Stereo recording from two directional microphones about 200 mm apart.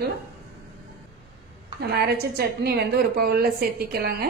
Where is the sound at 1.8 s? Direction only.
55° right (ahead or behind).